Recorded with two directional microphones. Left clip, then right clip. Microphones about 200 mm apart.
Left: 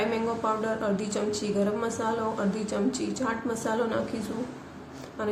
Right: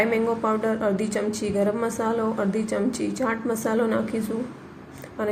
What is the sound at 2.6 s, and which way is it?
A woman's voice, 25° right (ahead or behind).